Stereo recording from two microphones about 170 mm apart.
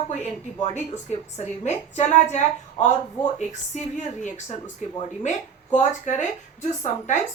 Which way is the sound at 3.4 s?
45° left (ahead or behind).